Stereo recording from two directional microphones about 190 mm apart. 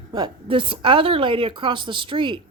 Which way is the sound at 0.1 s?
25° right (ahead or behind).